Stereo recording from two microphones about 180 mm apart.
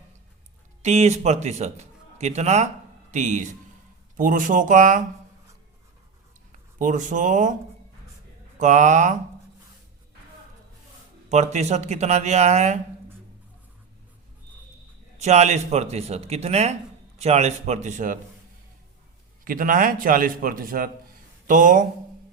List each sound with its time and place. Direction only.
0.8 s a man's voice: 40° right (ahead or behind)
6.7 s a man's voice: 45° right (ahead or behind)
8.5 s a man's voice: 45° right (ahead or behind)
11.3 s speech: 40° right (ahead or behind)
15.2 s speech: 40° right (ahead or behind)
19.5 s a man's voice: 50° right (ahead or behind)